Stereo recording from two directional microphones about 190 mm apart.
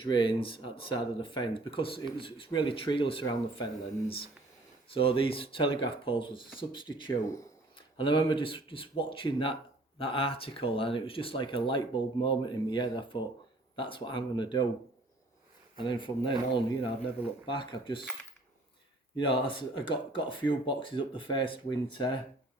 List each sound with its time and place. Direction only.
0.0 s speech: 25° left (ahead or behind)
4.9 s speech: 30° left (ahead or behind)
15.8 s speech: 25° left (ahead or behind)
19.1 s speech: 25° left (ahead or behind)